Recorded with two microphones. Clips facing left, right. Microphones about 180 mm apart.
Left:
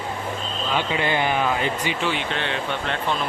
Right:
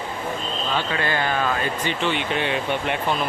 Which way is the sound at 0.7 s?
15° left (ahead or behind).